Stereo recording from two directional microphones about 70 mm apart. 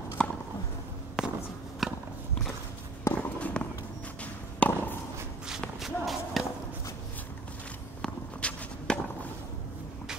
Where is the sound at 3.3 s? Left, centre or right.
Centre.